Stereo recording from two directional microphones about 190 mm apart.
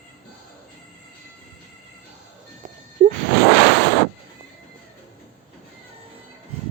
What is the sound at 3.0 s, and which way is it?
Whoosh, 40° right (ahead or behind).